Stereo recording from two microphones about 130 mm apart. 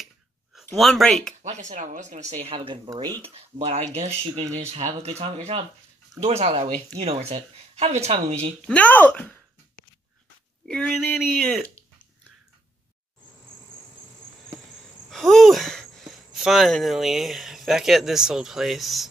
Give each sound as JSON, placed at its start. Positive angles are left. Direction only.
{"t": 0.7, "sound": "speech", "side_deg": 0}
{"t": 1.5, "sound": "speech", "side_deg": -70}
{"t": 2.9, "sound": "speech", "side_deg": -35}
{"t": 3.2, "sound": "speech", "side_deg": -50}
{"t": 8.5, "sound": "speech", "side_deg": 10}
{"t": 10.9, "sound": "speech", "side_deg": 0}
{"t": 15.0, "sound": "speech", "side_deg": 0}